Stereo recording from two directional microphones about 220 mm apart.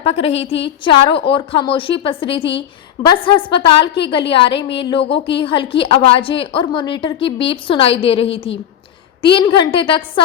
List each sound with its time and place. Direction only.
0.0 s a woman's voice: 25° left (ahead or behind)